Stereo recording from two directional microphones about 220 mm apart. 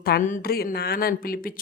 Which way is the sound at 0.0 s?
40° left (ahead or behind).